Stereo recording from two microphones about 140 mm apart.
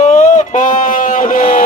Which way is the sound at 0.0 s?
60° left (ahead or behind).